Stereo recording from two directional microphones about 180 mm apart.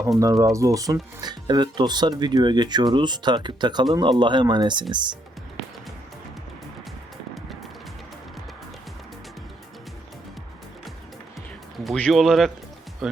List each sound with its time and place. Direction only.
0.2 s speech: 20° right (ahead or behind)
11.9 s speech: 5° left (ahead or behind)